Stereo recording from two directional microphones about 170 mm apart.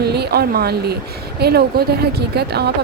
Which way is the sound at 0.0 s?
70° right (ahead or behind).